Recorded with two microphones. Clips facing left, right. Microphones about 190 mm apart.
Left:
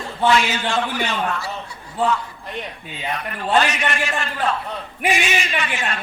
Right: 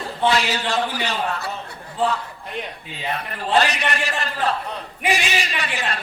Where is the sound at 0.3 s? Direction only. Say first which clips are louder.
Left 1 dB; 35° right (ahead or behind).